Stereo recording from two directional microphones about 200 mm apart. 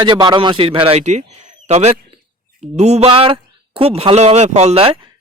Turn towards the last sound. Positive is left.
turn(degrees=-30)  # may be behind; listen again after turning